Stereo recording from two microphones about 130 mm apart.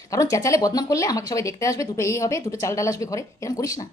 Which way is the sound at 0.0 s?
25° left (ahead or behind).